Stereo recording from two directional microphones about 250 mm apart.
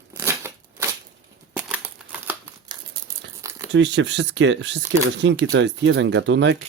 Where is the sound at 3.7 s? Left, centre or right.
Right.